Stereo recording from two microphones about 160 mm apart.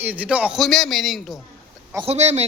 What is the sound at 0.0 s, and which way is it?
A man's voice, 10° right (ahead or behind).